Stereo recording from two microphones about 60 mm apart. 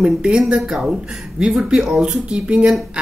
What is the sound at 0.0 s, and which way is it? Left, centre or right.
Speech, centre.